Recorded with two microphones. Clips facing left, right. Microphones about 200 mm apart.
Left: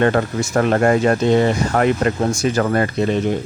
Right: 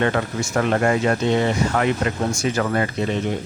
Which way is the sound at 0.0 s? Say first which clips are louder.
Left 5 dB; 45° left (ahead or behind).